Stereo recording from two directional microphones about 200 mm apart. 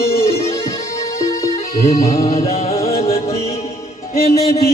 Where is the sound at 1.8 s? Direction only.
30° left (ahead or behind).